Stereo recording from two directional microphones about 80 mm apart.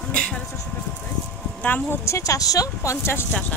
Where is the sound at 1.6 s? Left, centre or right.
Left.